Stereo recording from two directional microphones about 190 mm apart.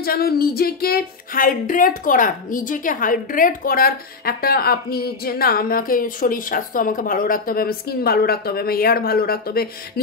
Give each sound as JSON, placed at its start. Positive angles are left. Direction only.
{"t": 0.0, "sound": "music", "side_deg": 55}